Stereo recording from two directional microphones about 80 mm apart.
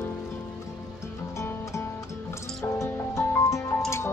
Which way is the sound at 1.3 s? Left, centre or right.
Left.